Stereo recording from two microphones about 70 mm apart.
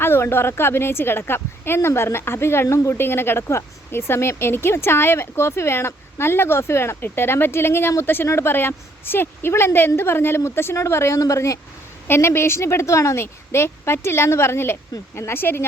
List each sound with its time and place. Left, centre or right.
0.0 s a woman's voice: left
12.0 s a woman's voice: left